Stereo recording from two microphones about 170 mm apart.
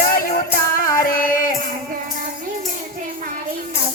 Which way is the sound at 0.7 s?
55° left (ahead or behind).